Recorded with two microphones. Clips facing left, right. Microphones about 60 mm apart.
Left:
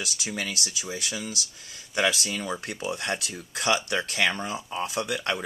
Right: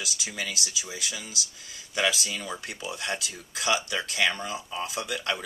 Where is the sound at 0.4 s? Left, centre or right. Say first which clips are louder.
Right 1 dB; left.